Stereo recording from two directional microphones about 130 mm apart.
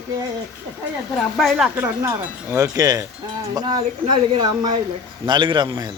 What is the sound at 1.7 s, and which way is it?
A man's voice, 20° right (ahead or behind).